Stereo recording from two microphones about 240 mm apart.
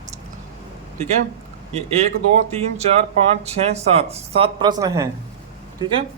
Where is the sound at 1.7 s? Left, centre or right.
Right.